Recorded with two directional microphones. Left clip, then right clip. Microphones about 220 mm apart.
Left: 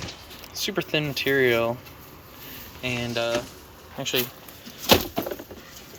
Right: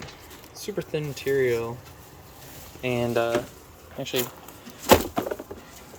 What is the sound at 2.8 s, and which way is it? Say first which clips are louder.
Speech: right 3 dB; 20° right (ahead or behind).